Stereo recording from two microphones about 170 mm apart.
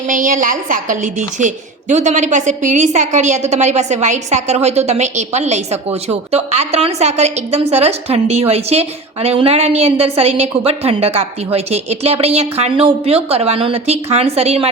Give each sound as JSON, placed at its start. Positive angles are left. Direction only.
{"t": 0.1, "sound": "a woman's voice", "side_deg": -50}